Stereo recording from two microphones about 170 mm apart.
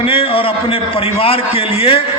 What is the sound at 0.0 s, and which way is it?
A man's voice, 30° left (ahead or behind).